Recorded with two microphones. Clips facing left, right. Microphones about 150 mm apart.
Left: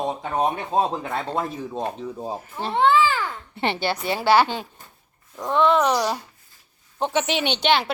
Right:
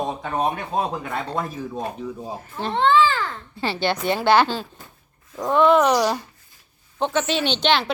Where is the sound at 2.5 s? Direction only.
10° left (ahead or behind).